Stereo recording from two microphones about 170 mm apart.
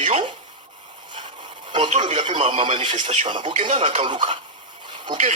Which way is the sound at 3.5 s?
45° right (ahead or behind).